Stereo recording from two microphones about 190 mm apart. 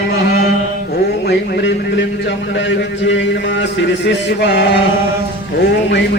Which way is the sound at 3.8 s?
65° left (ahead or behind).